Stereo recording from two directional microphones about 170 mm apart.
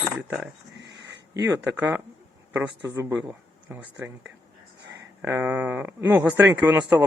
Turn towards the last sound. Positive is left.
turn(degrees=-15)  # may be behind; listen again after turning